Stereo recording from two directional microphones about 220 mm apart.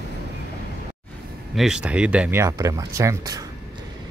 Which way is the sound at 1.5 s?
5° right (ahead or behind).